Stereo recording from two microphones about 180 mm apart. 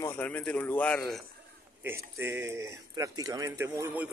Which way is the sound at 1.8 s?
15° right (ahead or behind).